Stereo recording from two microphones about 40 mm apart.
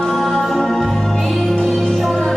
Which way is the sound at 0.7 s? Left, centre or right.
Centre.